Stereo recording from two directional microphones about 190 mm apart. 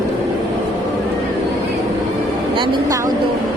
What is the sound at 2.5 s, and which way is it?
Speech, 25° right (ahead or behind).